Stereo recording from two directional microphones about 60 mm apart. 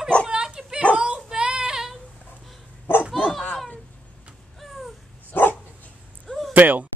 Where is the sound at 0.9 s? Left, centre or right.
Centre.